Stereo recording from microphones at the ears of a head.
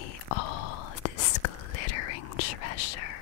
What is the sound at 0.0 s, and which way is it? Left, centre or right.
Whispering, left.